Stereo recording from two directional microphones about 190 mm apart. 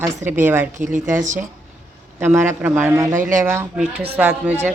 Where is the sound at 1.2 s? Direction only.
40° right (ahead or behind).